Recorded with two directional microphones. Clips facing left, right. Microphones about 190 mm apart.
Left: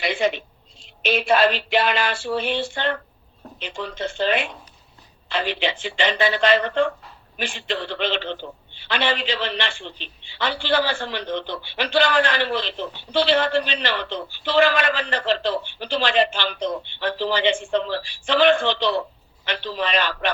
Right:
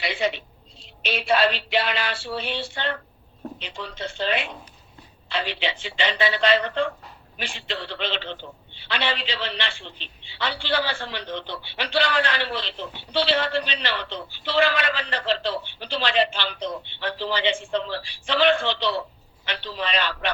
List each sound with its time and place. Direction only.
0.0 s a man's voice: 45° left (ahead or behind)